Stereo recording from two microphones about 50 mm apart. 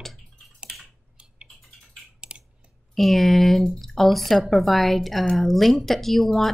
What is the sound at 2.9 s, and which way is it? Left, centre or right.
Speech, centre.